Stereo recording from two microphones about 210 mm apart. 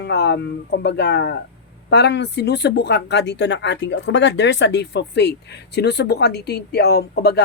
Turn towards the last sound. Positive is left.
turn(degrees=50)  # may be behind; listen again after turning